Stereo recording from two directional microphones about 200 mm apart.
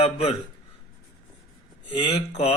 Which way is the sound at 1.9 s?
25° left (ahead or behind).